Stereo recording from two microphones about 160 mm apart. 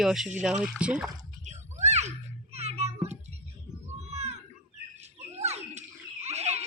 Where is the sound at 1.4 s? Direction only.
45° right (ahead or behind).